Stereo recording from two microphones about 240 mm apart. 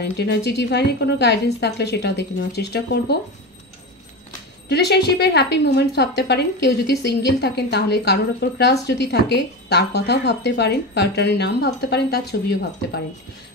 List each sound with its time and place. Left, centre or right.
0.0 s a woman's voice: left
4.6 s a woman's voice: left